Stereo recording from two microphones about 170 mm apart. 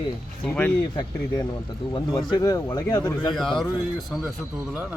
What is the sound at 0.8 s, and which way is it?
Speech, 20° left (ahead or behind).